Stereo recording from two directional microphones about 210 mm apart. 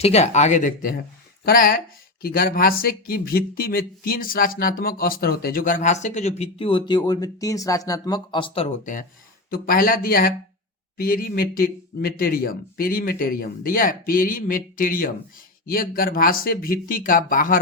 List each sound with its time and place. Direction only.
0.0 s speech: 30° left (ahead or behind)